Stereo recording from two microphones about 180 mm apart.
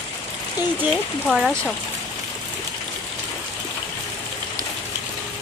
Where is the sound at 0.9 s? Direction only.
Centre (ahead or behind).